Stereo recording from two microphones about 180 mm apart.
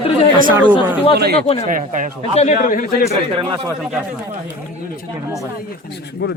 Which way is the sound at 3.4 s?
20° right (ahead or behind).